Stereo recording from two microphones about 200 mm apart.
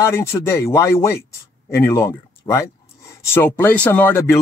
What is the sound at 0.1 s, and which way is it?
Speech, 15° left (ahead or behind).